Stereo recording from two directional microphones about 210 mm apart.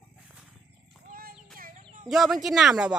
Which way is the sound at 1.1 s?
45° right (ahead or behind).